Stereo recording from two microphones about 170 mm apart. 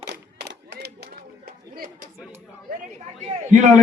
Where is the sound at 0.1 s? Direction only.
75° right (ahead or behind); by 2.0 s 60° right (ahead or behind).